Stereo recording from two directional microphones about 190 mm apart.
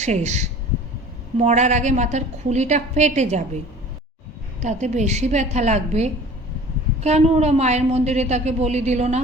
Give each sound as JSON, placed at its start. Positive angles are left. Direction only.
{"t": 0.0, "sound": "a woman's voice", "side_deg": -35}
{"t": 4.6, "sound": "a woman's voice", "side_deg": -40}